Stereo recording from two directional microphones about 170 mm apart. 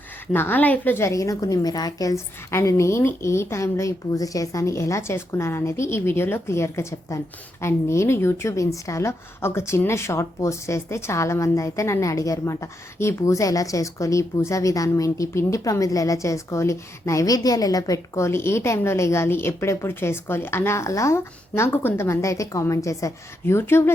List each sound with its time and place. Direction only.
0.3 s a woman's voice: 10° left (ahead or behind)